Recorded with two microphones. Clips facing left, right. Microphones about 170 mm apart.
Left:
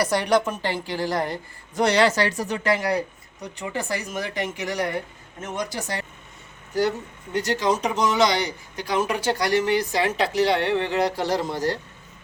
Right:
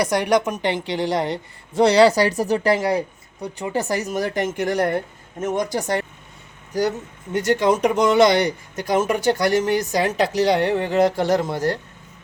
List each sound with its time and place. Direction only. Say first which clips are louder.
0.0 s a woman's voice: right 2 dB; 15° right (ahead or behind); by 2.7 s 35° right (ahead or behind)
2.7 s a woman's voice: right 3 dB; 25° right (ahead or behind)
3.6 s speech: right 5 dB; 40° right (ahead or behind)
7.3 s speech: right 5 dB; 55° right (ahead or behind)